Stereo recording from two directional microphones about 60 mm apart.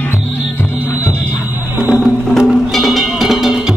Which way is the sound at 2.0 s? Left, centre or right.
Centre.